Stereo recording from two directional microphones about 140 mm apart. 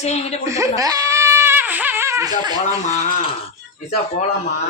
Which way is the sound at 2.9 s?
75° left (ahead or behind).